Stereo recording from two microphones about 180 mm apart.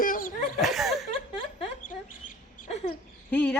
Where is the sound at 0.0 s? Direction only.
50° left (ahead or behind).